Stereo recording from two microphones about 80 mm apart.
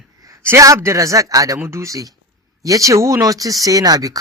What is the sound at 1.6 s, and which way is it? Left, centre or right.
Speech, right.